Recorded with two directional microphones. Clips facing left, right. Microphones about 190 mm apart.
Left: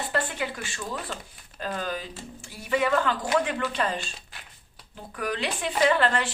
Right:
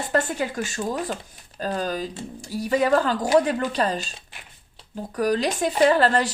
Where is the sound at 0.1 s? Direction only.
45° right (ahead or behind).